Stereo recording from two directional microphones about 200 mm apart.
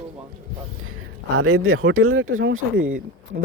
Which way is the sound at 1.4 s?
90° right.